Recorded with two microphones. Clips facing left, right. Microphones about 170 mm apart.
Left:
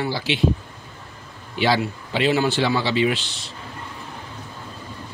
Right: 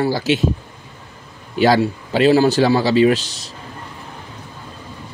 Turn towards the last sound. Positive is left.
turn(degrees=-40)  # may be behind; listen again after turning